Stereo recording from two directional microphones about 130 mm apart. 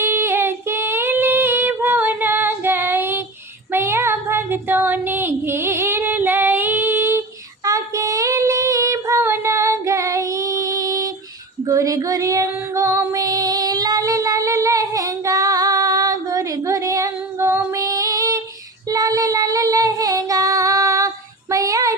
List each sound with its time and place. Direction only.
0.0 s female singing: 20° right (ahead or behind)
3.7 s child singing: 20° right (ahead or behind)
7.6 s female singing: 25° right (ahead or behind)
21.5 s child singing: 25° right (ahead or behind)